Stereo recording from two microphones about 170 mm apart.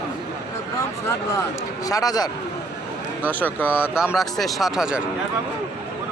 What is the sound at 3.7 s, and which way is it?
Speech, 5° right (ahead or behind).